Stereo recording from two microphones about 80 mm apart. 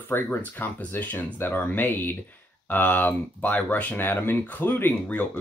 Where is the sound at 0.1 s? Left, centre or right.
Left.